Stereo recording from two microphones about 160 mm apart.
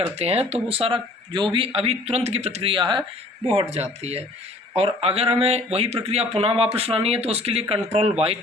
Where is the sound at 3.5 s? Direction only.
40° right (ahead or behind).